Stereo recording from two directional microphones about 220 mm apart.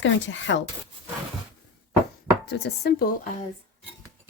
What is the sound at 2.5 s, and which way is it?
Speech, 50° left (ahead or behind).